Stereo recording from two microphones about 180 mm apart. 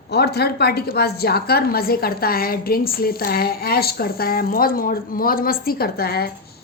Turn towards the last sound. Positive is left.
turn(degrees=60)  # may be behind; listen again after turning